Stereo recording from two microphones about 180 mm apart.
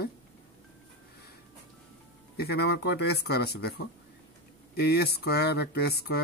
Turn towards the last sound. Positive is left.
turn(degrees=60)  # may be behind; listen again after turning